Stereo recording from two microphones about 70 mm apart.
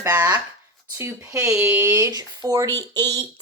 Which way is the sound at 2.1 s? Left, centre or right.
Right.